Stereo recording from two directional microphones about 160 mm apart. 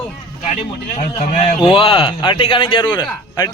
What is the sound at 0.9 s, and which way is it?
A man's voice, 35° left (ahead or behind).